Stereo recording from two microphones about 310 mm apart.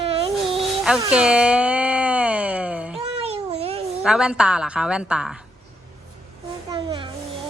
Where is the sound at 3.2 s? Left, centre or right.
Centre.